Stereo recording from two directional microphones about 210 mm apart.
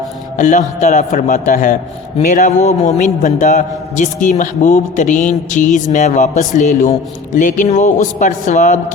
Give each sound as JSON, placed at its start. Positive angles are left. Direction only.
{"t": 0.3, "sound": "a man's voice", "side_deg": 35}